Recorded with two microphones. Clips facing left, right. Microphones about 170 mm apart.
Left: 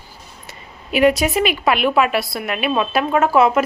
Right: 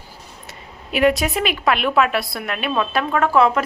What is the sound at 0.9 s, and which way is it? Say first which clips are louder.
A woman's voice: left 2 dB; centre (ahead or behind).